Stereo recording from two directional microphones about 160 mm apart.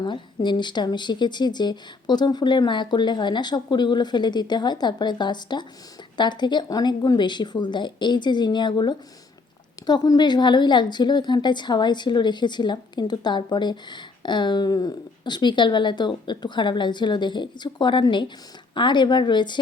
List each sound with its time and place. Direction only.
0.0 s a woman's voice: 30° left (ahead or behind)